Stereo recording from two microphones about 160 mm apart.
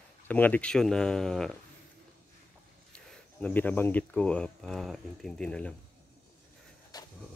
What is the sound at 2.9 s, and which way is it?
Speech, 5° left (ahead or behind).